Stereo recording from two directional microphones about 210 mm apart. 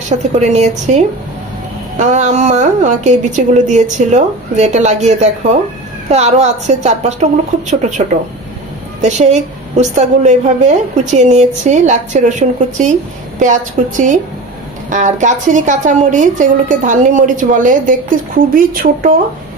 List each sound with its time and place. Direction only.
0.1 s a woman's voice: 35° right (ahead or behind)
9.0 s a woman's voice: 35° right (ahead or behind)